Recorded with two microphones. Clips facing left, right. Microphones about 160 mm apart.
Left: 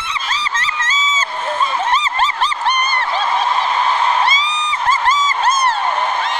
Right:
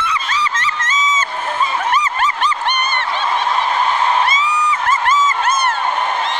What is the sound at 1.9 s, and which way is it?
Goose, 30° left (ahead or behind).